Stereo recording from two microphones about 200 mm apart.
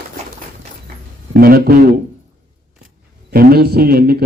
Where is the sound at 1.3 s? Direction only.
50° right (ahead or behind).